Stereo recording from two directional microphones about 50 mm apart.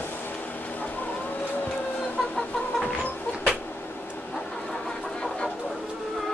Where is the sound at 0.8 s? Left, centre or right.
Left.